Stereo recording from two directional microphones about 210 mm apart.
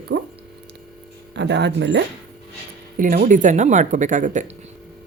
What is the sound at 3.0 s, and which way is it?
Speech, 40° right (ahead or behind).